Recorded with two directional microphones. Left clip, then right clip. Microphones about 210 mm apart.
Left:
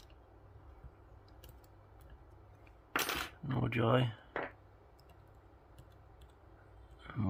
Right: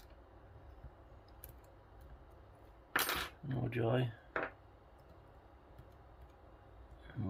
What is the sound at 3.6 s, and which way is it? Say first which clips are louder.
Speech: left 4 dB; 35° left (ahead or behind).